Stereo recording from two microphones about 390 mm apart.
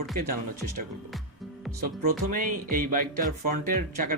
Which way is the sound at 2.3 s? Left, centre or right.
Right.